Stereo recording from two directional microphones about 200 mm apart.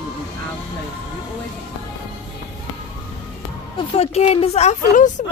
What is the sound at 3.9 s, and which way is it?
Speech, 30° left (ahead or behind).